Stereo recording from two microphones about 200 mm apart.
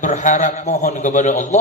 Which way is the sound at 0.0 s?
40° left (ahead or behind).